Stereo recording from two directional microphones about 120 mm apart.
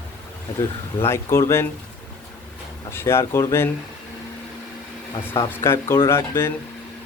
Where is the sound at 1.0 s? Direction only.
20° left (ahead or behind).